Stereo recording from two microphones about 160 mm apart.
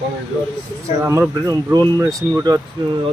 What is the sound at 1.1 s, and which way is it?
Speech, 20° right (ahead or behind).